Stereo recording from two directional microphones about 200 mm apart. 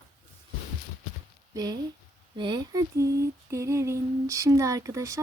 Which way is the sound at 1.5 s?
20° right (ahead or behind).